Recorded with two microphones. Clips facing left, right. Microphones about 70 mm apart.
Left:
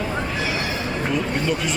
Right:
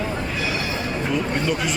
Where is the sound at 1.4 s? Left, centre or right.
Centre.